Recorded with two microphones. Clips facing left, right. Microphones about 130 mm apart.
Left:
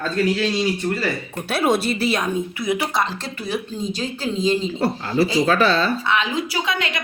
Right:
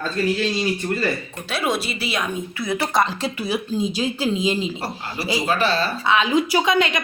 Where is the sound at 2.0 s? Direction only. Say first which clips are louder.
Left 4 dB; 40° left (ahead or behind).